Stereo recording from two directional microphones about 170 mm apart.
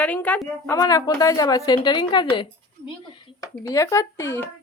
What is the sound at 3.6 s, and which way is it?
Speech, 20° left (ahead or behind).